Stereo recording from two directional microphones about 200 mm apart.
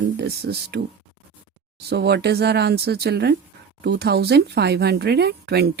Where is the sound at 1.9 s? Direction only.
55° right (ahead or behind).